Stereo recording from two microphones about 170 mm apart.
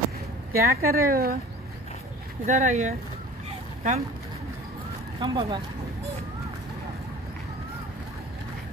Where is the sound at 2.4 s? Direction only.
45° right (ahead or behind).